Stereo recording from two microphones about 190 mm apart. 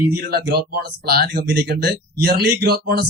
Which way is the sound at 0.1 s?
55° right (ahead or behind).